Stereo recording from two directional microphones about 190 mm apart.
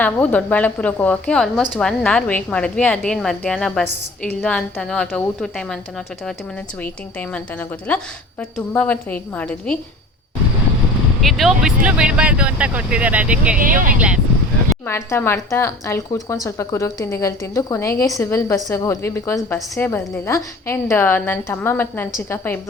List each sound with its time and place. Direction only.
0.0 s a woman's voice: 10° left (ahead or behind)
6.8 s speech: 10° left (ahead or behind)
11.2 s speech: centre (ahead or behind)
13.6 s speech: 45° right (ahead or behind)
14.8 s speech: 15° left (ahead or behind)